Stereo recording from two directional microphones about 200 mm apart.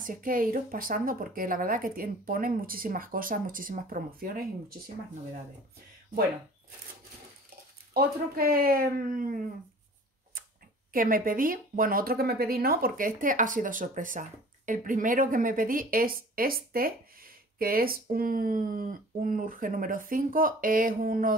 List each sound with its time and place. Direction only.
0.0 s speech: 45° right (ahead or behind)
7.9 s speech: 50° right (ahead or behind)
10.9 s speech: 45° right (ahead or behind)